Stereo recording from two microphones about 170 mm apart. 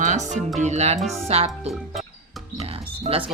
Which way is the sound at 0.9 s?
Centre (ahead or behind).